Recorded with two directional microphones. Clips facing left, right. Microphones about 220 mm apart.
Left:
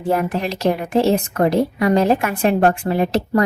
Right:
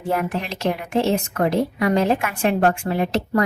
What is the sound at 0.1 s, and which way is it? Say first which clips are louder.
Speech: left 4 dB; 35° left (ahead or behind).